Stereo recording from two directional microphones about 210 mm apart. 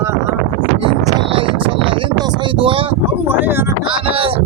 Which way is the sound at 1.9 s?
20° right (ahead or behind).